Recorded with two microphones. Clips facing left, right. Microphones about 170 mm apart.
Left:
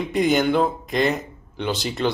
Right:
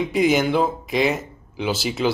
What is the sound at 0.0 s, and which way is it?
Speech, centre (ahead or behind).